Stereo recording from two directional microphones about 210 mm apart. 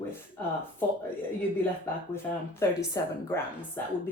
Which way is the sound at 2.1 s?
10° left (ahead or behind).